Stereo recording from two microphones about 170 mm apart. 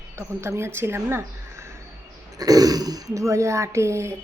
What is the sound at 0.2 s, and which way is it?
A woman's voice, 15° right (ahead or behind).